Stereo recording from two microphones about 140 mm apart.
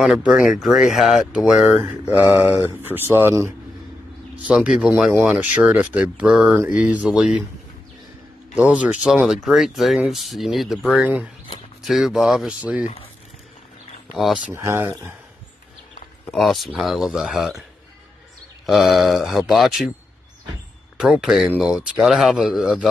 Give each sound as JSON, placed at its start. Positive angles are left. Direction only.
{"t": 0.0, "sound": "speech", "side_deg": -5}
{"t": 8.5, "sound": "speech", "side_deg": -10}
{"t": 12.8, "sound": "speech", "side_deg": 45}
{"t": 14.1, "sound": "speech", "side_deg": 0}
{"t": 14.5, "sound": "speech", "side_deg": -20}
{"t": 16.3, "sound": "speech", "side_deg": 0}
{"t": 18.7, "sound": "speech", "side_deg": 0}
{"t": 21.0, "sound": "speech", "side_deg": -5}